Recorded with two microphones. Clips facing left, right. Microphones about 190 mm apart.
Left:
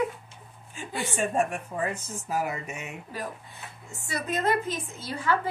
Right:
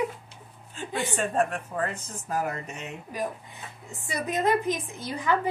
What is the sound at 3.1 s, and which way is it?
A woman's voice, 15° right (ahead or behind).